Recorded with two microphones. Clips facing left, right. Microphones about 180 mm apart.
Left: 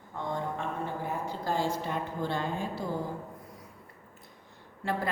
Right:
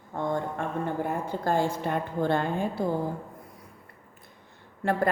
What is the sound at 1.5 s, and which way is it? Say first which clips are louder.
A woman's voice: right 5 dB; 55° right (ahead or behind).